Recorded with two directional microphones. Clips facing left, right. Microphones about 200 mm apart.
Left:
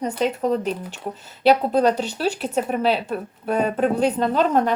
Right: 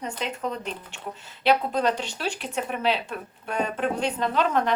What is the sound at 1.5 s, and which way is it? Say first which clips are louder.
Speech: left 6 dB; 40° left (ahead or behind).